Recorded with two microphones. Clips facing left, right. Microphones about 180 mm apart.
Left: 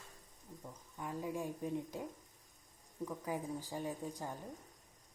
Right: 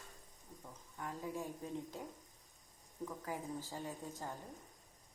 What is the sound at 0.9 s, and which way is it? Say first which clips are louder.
A woman's voice: left 3 dB; 15° left (ahead or behind).